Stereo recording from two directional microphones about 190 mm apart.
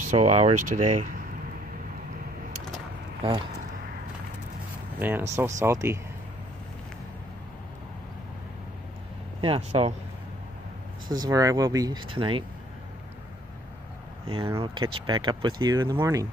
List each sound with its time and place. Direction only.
0.0 s speech: 40° right (ahead or behind)
3.2 s speech: 30° right (ahead or behind)
4.9 s speech: 10° right (ahead or behind)
9.4 s speech: 30° right (ahead or behind)
11.1 s speech: 20° right (ahead or behind)
14.2 s speech: 30° right (ahead or behind)